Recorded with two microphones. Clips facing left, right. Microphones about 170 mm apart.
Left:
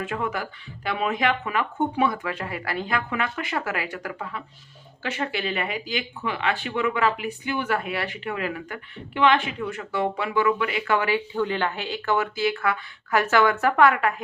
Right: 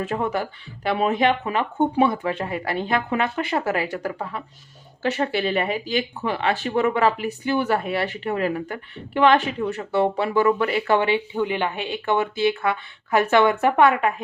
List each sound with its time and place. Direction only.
0.0 s speech: 35° right (ahead or behind)